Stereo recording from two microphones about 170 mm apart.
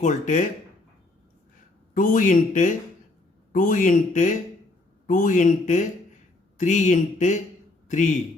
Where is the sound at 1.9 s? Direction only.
50° left (ahead or behind).